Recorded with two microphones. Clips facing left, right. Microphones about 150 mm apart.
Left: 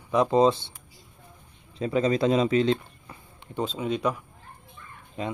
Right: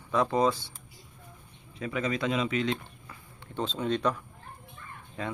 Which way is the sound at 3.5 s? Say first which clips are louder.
Left 2 dB; 10° left (ahead or behind).